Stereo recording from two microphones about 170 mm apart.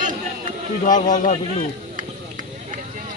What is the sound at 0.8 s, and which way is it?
Speech, 50° left (ahead or behind).